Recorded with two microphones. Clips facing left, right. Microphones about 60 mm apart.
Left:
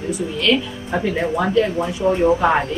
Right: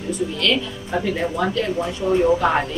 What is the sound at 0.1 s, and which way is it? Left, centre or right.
A woman's voice, centre.